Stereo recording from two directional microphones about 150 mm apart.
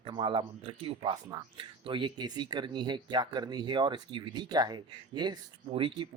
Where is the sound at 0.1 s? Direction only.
35° right (ahead or behind).